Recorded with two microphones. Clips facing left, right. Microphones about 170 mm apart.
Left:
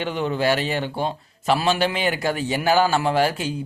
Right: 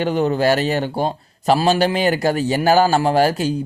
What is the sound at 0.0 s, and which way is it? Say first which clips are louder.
A man's voice: right 5 dB; 40° right (ahead or behind).